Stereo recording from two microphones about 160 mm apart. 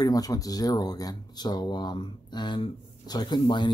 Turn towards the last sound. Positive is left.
turn(degrees=30)  # may be behind; listen again after turning